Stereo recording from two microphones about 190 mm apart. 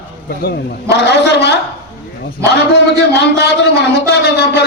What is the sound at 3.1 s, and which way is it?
A man's voice, 60° left (ahead or behind).